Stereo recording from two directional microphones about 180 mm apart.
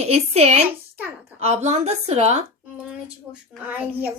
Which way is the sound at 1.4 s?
35° right (ahead or behind).